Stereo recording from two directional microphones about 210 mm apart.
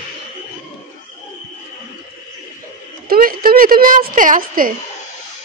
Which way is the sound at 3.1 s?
45° right (ahead or behind).